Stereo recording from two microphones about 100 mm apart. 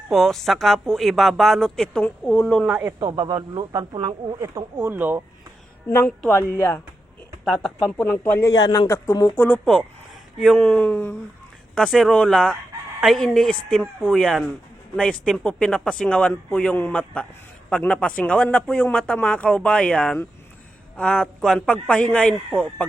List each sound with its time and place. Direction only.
0.1 s speech: centre (ahead or behind)
3.0 s speech: 45° right (ahead or behind)
3.9 s speech: 55° right (ahead or behind)
4.8 s speech: 20° right (ahead or behind)
6.3 s speech: 25° left (ahead or behind)
7.4 s speech: 5° right (ahead or behind)
8.0 s speech: 15° left (ahead or behind)
8.5 s a man's voice: 40° left (ahead or behind)
9.3 s speech: 15° left (ahead or behind)
10.3 s speech: 5° left (ahead or behind)
10.6 s speech: 15° left (ahead or behind)